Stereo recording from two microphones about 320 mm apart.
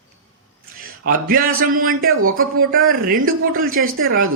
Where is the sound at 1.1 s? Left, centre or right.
Right.